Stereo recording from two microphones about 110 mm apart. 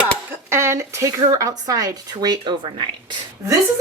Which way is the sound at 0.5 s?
25° right (ahead or behind).